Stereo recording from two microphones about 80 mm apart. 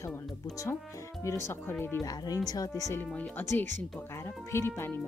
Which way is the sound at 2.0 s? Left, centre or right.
Left.